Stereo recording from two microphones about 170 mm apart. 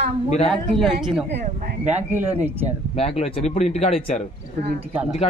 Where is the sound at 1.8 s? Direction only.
40° right (ahead or behind).